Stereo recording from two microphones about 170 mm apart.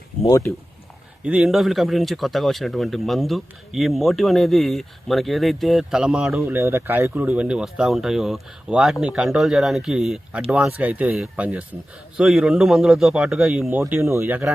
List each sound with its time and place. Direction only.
0.3 s speech: 20° left (ahead or behind)
1.2 s speech: 5° right (ahead or behind)
6.5 s speech: 15° right (ahead or behind)